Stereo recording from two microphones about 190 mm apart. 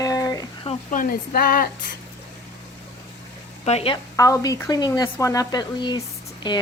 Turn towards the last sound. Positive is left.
turn(degrees=25)  # may be behind; listen again after turning